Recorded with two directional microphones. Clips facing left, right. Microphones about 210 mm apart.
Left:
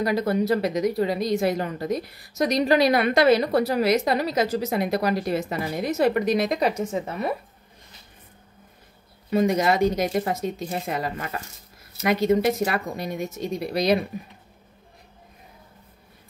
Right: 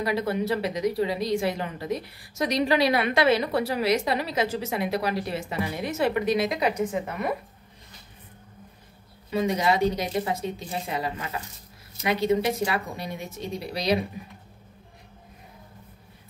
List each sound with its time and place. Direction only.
0.0 s a woman's voice: 40° left (ahead or behind)
6.9 s a woman's voice: 30° left (ahead or behind)
9.3 s a woman's voice: 50° left (ahead or behind)